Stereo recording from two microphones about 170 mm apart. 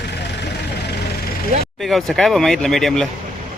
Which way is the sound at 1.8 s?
Centre (ahead or behind).